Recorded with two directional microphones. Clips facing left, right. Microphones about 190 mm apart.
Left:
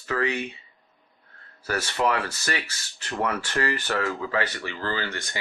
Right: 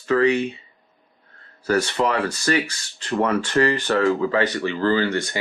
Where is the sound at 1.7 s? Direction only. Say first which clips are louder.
Right 5 dB; 30° right (ahead or behind).